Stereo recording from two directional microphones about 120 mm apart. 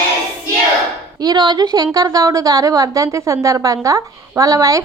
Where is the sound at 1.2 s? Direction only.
35° right (ahead or behind).